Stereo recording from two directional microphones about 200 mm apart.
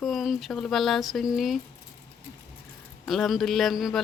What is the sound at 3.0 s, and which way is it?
Speech, centre (ahead or behind).